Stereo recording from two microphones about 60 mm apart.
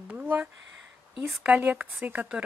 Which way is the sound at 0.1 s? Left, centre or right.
Right.